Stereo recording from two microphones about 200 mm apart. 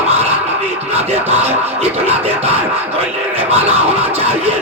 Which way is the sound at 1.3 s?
30° right (ahead or behind).